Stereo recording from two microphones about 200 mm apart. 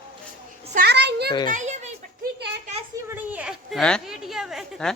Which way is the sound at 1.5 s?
35° right (ahead or behind).